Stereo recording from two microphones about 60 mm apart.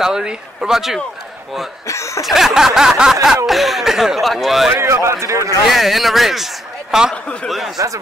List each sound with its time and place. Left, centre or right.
0.0 s a sound: centre
1.9 s speech: left
2.2 s a sound: centre
3.4 s a man's voice: centre
4.7 s speech: right
5.7 s a man's voice: centre
7.7 s speech: right